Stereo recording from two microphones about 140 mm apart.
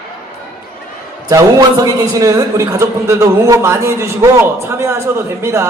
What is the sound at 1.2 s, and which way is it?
A man's voice, 25° right (ahead or behind).